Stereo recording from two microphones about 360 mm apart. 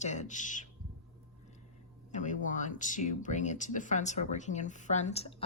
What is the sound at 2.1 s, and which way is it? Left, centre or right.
Speech, left.